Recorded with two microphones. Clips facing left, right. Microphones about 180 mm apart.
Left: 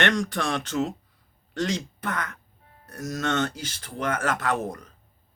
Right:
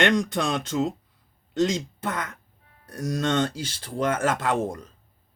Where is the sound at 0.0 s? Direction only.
20° right (ahead or behind).